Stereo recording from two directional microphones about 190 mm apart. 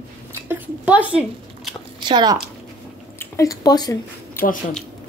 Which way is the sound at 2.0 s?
25° right (ahead or behind).